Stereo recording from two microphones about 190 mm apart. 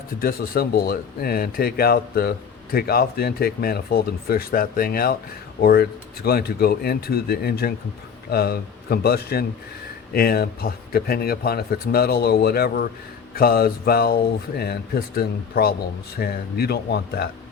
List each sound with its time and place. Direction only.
0.2 s speech: 50° left (ahead or behind)